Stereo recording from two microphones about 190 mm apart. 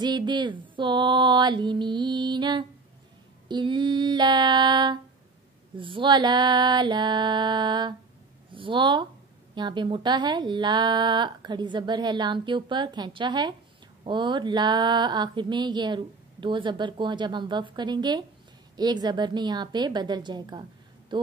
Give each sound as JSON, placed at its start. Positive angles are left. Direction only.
{"t": 0.0, "sound": "speech", "side_deg": -25}